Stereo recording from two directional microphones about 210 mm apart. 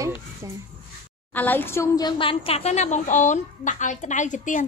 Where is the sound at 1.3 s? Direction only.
10° left (ahead or behind).